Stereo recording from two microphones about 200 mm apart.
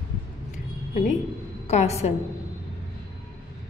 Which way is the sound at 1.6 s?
35° left (ahead or behind).